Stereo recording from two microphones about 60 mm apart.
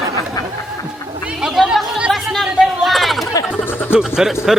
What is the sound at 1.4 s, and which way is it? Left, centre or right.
Speech, centre.